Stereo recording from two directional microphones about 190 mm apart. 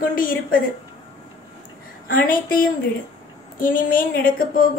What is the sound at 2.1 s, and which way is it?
A woman's voice, 50° left (ahead or behind).